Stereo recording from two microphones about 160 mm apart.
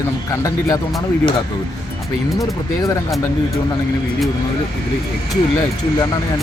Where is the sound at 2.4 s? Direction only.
20° left (ahead or behind).